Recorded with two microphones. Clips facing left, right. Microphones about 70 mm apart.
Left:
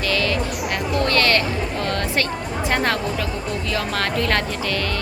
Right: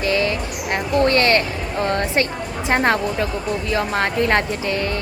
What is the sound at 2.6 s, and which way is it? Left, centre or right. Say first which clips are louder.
A woman's voice: right 4 dB; right.